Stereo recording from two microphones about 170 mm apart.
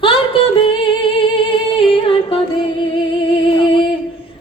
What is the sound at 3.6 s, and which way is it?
Singing, 30° left (ahead or behind).